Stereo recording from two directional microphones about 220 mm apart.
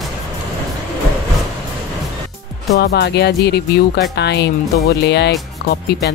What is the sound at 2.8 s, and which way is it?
Speech, 50° left (ahead or behind).